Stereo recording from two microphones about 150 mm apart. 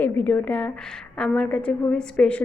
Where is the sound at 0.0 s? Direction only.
10° left (ahead or behind).